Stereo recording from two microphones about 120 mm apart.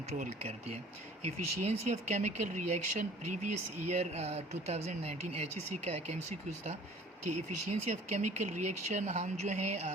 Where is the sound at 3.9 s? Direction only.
60° right (ahead or behind).